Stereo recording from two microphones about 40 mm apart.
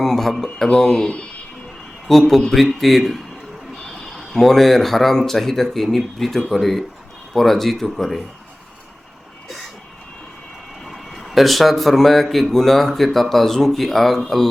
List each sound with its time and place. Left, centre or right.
0.0 s speech: centre
0.4 s speech: centre
2.0 s speech: centre
10.8 s speech: centre